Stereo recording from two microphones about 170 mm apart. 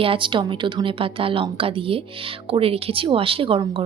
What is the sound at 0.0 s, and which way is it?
A woman's voice, 30° right (ahead or behind).